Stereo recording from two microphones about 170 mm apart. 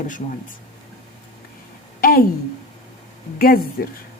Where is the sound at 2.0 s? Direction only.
60° left (ahead or behind).